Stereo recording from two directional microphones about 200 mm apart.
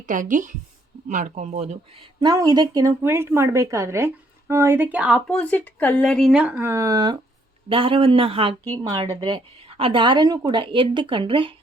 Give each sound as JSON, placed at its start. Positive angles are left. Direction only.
{"t": 0.0, "sound": "a woman's voice", "side_deg": -40}